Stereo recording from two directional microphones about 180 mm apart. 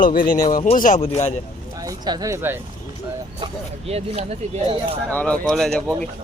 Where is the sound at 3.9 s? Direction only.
35° right (ahead or behind).